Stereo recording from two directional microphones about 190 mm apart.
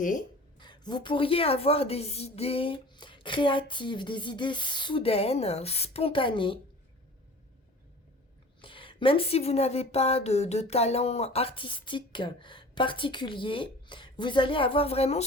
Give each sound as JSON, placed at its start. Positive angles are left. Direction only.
{"t": 0.0, "sound": "speech", "side_deg": 45}
{"t": 0.6, "sound": "speech", "side_deg": 25}
{"t": 8.6, "sound": "speech", "side_deg": 25}